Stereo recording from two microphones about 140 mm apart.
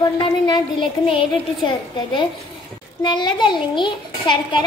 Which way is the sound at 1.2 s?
35° left (ahead or behind).